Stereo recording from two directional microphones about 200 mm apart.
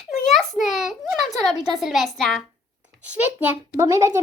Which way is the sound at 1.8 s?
Centre (ahead or behind).